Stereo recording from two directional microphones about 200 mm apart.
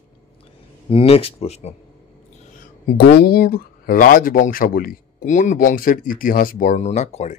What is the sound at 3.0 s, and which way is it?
Speech, 50° left (ahead or behind).